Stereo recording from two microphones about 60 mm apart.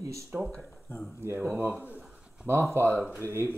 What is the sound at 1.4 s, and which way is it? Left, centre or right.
Speech, right.